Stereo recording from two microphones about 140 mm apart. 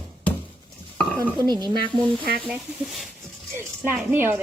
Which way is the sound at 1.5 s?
30° right (ahead or behind).